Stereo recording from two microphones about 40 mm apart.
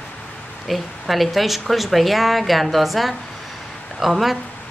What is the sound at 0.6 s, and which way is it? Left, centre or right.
Speech, centre.